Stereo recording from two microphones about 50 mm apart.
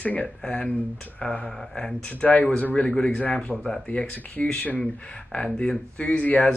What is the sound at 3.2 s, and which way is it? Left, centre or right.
Speech, left.